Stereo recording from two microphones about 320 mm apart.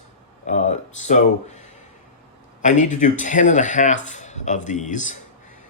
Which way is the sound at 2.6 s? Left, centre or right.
Left.